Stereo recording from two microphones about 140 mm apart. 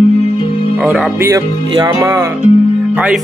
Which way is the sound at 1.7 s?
25° right (ahead or behind).